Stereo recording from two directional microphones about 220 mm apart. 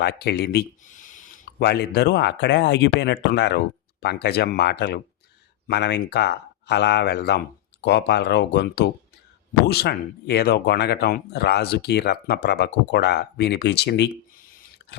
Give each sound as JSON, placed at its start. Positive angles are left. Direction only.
{"t": 0.0, "sound": "speech", "side_deg": 45}